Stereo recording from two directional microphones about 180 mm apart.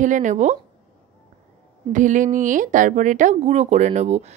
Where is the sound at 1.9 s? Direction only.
45° right (ahead or behind).